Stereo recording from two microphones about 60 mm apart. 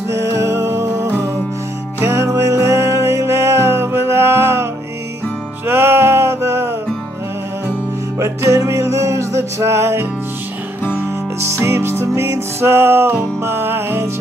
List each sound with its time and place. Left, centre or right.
0.1 s music: right
5.7 s music: right
8.2 s music: right
10.8 s music: left
11.4 s music: right